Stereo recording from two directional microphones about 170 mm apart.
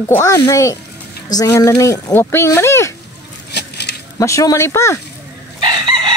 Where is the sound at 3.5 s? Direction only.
80° left.